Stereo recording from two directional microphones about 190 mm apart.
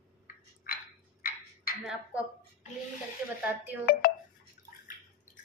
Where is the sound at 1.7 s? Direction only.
50° left (ahead or behind).